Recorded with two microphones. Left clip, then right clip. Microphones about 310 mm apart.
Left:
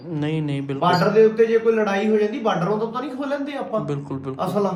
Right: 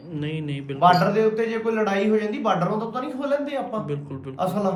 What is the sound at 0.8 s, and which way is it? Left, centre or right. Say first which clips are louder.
A man's voice: left 1 dB; centre.